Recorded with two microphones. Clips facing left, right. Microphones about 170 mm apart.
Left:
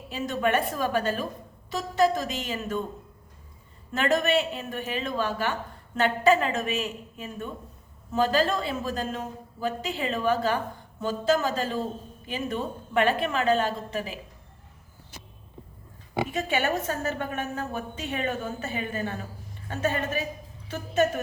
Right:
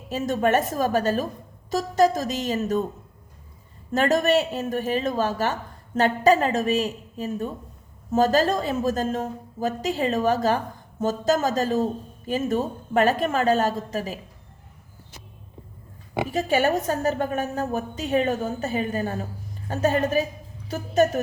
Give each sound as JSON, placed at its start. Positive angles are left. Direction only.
{"t": 0.1, "sound": "a woman's voice", "side_deg": -45}
{"t": 3.9, "sound": "a woman's voice", "side_deg": -40}
{"t": 16.3, "sound": "a woman's voice", "side_deg": -35}